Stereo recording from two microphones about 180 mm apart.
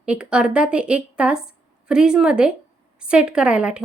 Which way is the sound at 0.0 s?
5° right (ahead or behind).